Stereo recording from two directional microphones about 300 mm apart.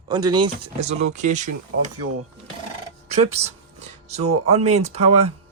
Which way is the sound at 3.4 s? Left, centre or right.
Right.